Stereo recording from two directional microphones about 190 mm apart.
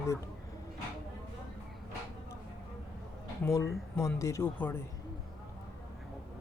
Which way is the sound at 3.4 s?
15° left (ahead or behind).